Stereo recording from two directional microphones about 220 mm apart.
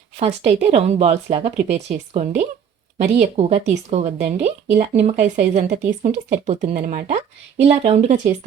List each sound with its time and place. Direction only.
0.2 s a woman's voice: 30° right (ahead or behind)